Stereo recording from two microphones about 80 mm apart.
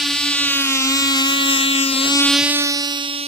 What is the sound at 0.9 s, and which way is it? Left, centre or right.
Motorboat, left.